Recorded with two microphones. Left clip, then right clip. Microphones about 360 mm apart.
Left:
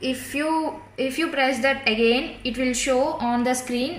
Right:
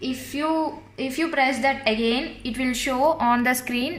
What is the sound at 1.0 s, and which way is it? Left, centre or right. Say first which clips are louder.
A woman's voice: even; centre.